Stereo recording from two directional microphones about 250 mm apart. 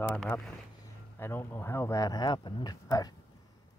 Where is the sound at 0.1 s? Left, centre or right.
Centre.